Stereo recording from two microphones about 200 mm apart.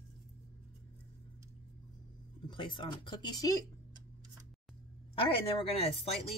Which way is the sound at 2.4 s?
25° left (ahead or behind).